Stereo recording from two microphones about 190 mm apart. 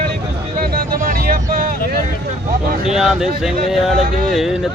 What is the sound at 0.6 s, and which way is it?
Speech, 50° right (ahead or behind).